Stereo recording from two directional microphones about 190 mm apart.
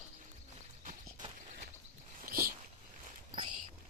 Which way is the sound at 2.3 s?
55° right (ahead or behind).